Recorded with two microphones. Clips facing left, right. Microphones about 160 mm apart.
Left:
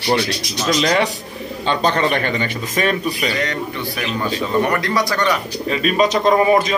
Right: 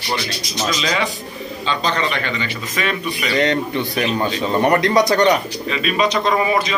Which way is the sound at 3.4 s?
25° right (ahead or behind).